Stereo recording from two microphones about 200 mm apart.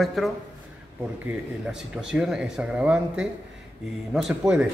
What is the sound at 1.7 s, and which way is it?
Speech, 5° right (ahead or behind).